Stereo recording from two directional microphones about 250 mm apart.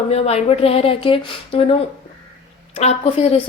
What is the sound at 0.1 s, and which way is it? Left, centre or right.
A woman's voice, left.